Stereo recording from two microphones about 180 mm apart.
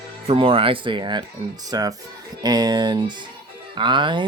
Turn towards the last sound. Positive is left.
turn(degrees=-25)  # may be behind; listen again after turning